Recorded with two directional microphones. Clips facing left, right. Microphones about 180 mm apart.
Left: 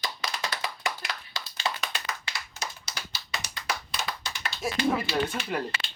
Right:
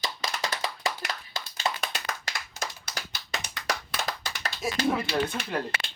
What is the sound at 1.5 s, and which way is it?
Clapping, 45° right (ahead or behind).